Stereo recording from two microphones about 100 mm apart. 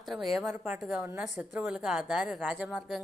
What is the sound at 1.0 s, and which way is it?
Speech, 20° right (ahead or behind).